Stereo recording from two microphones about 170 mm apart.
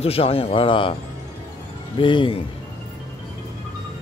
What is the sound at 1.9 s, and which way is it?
Speech, 30° left (ahead or behind).